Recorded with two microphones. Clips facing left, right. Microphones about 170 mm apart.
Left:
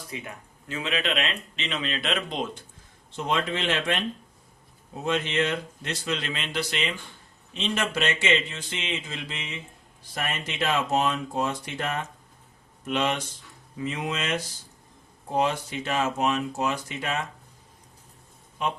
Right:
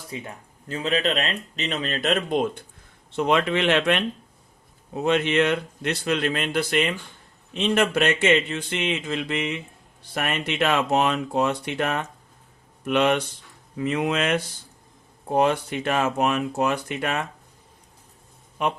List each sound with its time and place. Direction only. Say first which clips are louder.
0.1 s speech: right 4 dB; 35° right (ahead or behind); by 2.6 s 50° right (ahead or behind)
3.1 s speech: right 6 dB; 65° right (ahead or behind)
5.0 s speech: right 5 dB; 65° right (ahead or behind)